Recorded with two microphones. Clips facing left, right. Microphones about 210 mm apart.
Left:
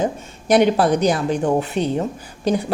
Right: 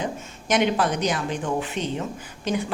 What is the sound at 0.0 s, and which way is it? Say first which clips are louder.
Speech: left 7 dB; 40° left (ahead or behind).